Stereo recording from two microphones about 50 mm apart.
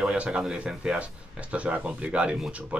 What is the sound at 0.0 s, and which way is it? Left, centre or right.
Speech, right.